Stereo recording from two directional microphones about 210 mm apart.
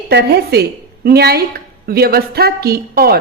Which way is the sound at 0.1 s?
50° right (ahead or behind).